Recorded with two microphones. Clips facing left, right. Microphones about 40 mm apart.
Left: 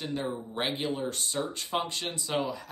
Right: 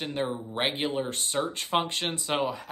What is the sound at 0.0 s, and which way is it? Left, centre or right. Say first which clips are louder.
Speech: right 2 dB; right.